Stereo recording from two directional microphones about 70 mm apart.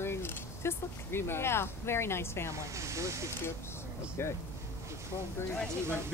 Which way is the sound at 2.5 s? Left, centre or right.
Right.